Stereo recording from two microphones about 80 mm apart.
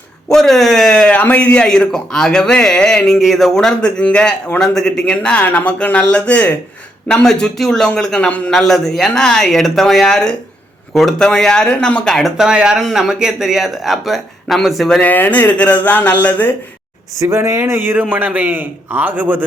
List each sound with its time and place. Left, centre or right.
0.3 s a man's voice: centre
12.4 s a man's voice: centre
15.1 s speech: left
17.2 s a man's voice: right